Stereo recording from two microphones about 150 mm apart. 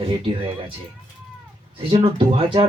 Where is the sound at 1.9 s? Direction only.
40° right (ahead or behind).